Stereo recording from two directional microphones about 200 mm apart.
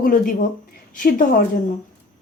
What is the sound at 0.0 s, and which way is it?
A woman's voice, 40° left (ahead or behind).